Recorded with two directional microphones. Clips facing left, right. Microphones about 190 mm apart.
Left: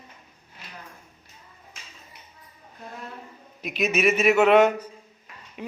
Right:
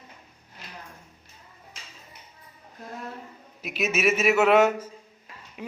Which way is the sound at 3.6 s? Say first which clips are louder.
Left 2 dB; 5° right (ahead or behind).